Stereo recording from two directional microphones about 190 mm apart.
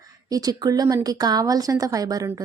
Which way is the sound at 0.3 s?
20° right (ahead or behind).